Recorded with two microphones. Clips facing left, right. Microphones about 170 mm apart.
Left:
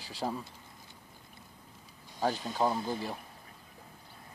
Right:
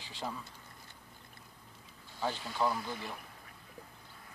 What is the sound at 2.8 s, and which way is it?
Speech, 35° left (ahead or behind).